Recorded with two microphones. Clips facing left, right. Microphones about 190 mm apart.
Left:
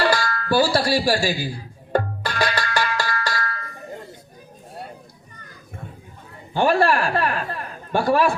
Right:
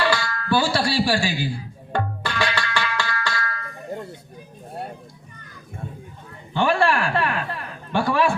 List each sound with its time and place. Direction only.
0.0 s music: 40° left (ahead or behind)
6.5 s a woman's voice: 40° left (ahead or behind)